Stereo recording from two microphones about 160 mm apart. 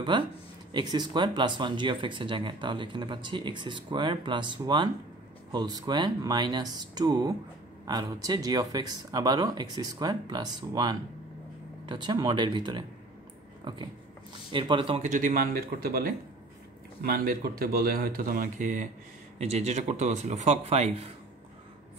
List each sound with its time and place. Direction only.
0.7 s speech: 30° right (ahead or behind)
14.5 s speech: 30° right (ahead or behind)
15.0 s speech: 55° right (ahead or behind)
19.3 s speech: 45° right (ahead or behind)